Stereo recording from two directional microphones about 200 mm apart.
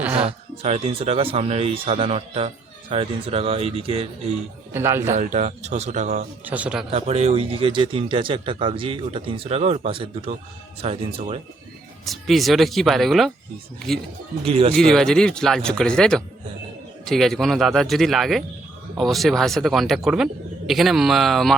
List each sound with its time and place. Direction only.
0.0 s a sound: 10° right (ahead or behind)
0.3 s speech: 30° right (ahead or behind)
4.7 s a man's voice: 10° right (ahead or behind)
5.1 s speech: 35° right (ahead or behind)
6.4 s a man's voice: 5° right (ahead or behind)
6.9 s speech: 30° right (ahead or behind)
12.0 s speech: centre (ahead or behind)
14.4 s speech: 25° right (ahead or behind)
14.7 s speech: 5° left (ahead or behind)